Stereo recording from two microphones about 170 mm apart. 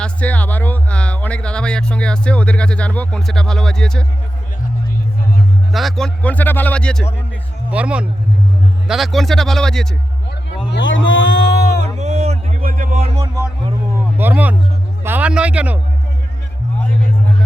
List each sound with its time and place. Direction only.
0.0 s speech: 10° left (ahead or behind)
5.7 s speech: centre (ahead or behind)
7.7 s speech: 5° right (ahead or behind)
10.7 s a sound: 90° left
11.8 s music: 40° right (ahead or behind)
12.6 s music: 50° right (ahead or behind)
13.1 s music: 20° right (ahead or behind)
14.2 s a sound: 10° right (ahead or behind)
15.0 s speech: 10° right (ahead or behind)